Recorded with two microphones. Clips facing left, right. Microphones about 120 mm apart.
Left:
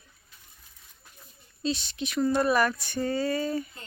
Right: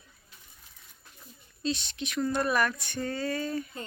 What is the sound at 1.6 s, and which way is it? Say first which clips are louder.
Speech: left 2 dB; centre (ahead or behind).